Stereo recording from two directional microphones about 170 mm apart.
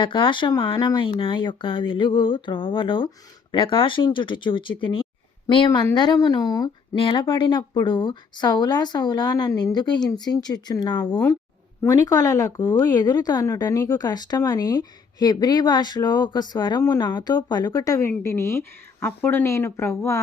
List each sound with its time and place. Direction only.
0.0 s speech: 30° left (ahead or behind)